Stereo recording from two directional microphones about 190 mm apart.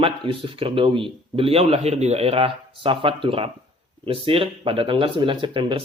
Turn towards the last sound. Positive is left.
turn(degrees=-25)  # may be behind; listen again after turning